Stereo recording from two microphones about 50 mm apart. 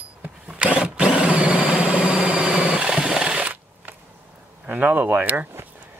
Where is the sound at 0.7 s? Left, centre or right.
Right.